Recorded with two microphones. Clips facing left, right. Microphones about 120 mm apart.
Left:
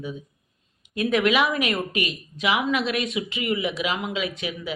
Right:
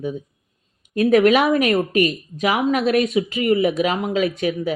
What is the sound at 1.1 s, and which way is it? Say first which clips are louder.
A woman's voice: right 7 dB; 45° right (ahead or behind).